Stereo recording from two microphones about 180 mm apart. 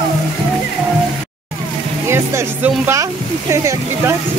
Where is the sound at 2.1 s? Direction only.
15° right (ahead or behind).